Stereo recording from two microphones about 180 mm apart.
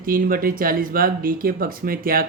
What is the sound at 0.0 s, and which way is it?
Speech, 50° right (ahead or behind).